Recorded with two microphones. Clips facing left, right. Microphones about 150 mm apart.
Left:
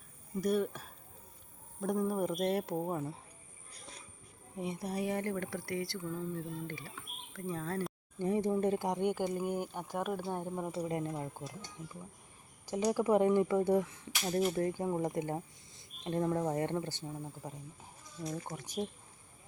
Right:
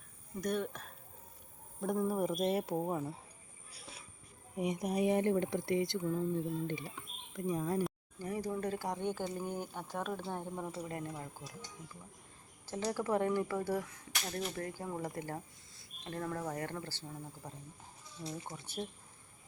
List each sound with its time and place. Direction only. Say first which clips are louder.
0.4 s speech: left 4 dB; 5° left (ahead or behind)
3.7 s a sound: even; 5° right (ahead or behind)
4.5 s speech: right 3 dB; 15° right (ahead or behind)
8.2 s speech: left 6 dB; 25° left (ahead or behind)
12.6 s speech: left 5 dB; 15° left (ahead or behind)
18.5 s speech: left 4 dB; 15° left (ahead or behind)